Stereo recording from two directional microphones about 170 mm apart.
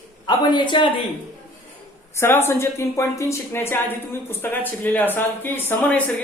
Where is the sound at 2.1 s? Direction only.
15° left (ahead or behind).